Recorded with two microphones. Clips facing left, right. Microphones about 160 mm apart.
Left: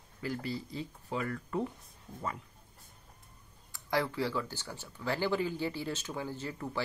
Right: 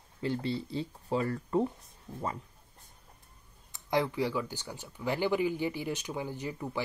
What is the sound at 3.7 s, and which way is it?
Speech, 20° right (ahead or behind).